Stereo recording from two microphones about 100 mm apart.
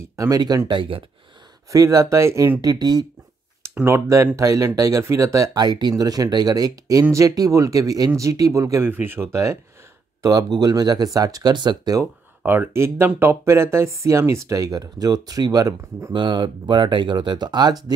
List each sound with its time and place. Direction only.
0.1 s speech: 35° right (ahead or behind)
0.7 s speech: 55° right (ahead or behind)
1.7 s speech: 35° right (ahead or behind)
2.7 s speech: 45° right (ahead or behind)
3.8 s speech: 30° right (ahead or behind)
5.6 s speech: 45° right (ahead or behind); by 9.6 s 30° right (ahead or behind)
10.6 s speech: 45° right (ahead or behind)
12.4 s speech: 25° right (ahead or behind)
16.1 s speech: 50° right (ahead or behind)